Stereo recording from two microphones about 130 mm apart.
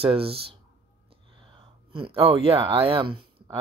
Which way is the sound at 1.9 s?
45° right (ahead or behind).